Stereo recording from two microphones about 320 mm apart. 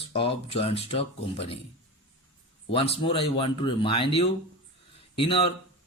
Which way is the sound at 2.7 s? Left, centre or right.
Centre.